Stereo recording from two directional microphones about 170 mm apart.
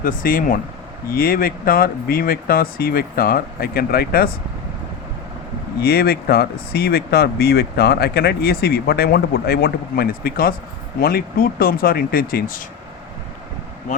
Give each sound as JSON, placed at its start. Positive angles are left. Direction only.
{"t": 0.0, "sound": "speech", "side_deg": 55}
{"t": 5.8, "sound": "speech", "side_deg": 65}